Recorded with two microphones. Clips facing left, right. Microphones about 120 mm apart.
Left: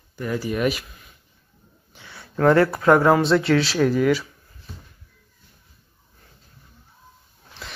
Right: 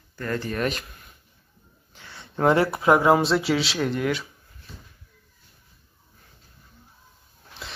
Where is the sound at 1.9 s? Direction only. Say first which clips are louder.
Left 1 dB; 15° left (ahead or behind).